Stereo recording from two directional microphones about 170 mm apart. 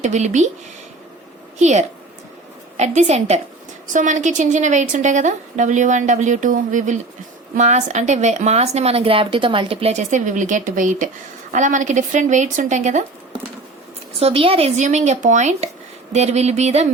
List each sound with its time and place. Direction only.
0.0 s speech: 45° right (ahead or behind)
1.5 s a woman's voice: 40° right (ahead or behind)
14.2 s speech: 35° right (ahead or behind)